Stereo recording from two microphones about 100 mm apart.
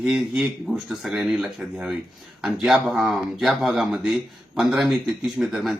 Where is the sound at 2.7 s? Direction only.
Centre (ahead or behind).